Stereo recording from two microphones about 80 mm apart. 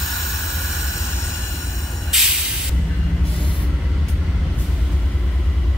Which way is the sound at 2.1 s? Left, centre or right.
Centre.